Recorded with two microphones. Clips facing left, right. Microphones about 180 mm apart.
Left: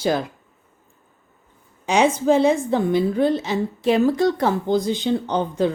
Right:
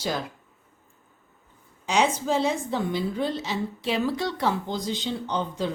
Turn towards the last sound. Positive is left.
turn(degrees=55)  # may be behind; listen again after turning